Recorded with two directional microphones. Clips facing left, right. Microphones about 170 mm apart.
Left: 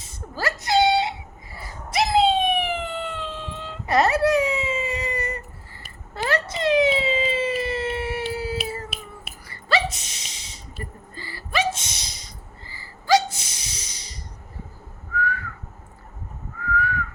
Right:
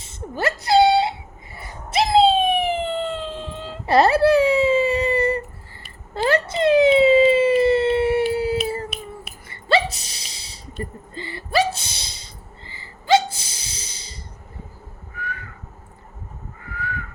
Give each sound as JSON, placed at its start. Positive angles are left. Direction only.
{"t": 0.0, "sound": "whimper", "side_deg": -25}
{"t": 1.5, "sound": "a sound", "side_deg": -25}
{"t": 11.1, "sound": "hiccup", "side_deg": -25}
{"t": 11.5, "sound": "gasp", "side_deg": -35}
{"t": 16.7, "sound": "whistling", "side_deg": -25}